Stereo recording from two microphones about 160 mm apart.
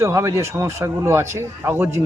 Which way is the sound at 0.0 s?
15° right (ahead or behind).